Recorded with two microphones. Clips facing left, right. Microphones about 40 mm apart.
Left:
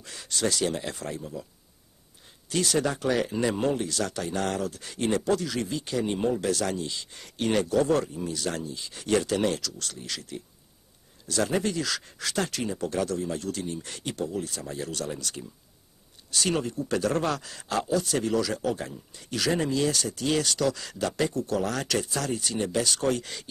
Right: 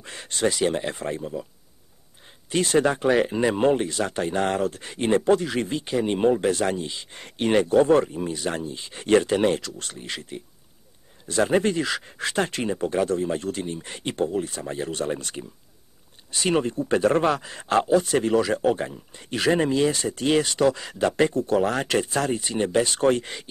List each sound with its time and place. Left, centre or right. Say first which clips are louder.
0.0 s speech: right 4 dB; right
2.5 s speech: right 5 dB; right